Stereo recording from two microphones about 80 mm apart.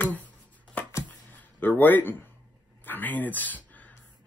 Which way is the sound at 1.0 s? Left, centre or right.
Left.